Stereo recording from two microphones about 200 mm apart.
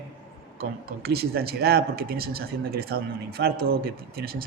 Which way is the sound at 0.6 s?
50° right (ahead or behind).